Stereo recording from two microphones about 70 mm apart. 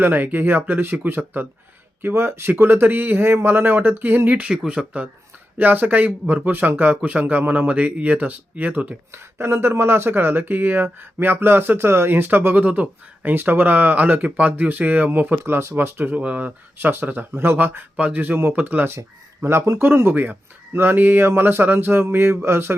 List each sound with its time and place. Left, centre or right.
0.0 s speech: right
5.5 s speech: right
9.1 s speech: right
16.1 s speech: centre
16.7 s speech: right
18.9 s speech: right